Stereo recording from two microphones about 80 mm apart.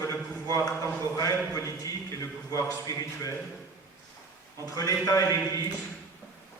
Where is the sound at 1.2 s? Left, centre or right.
Left.